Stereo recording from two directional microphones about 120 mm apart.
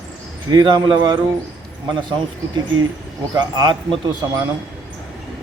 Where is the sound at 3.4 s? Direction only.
40° right (ahead or behind).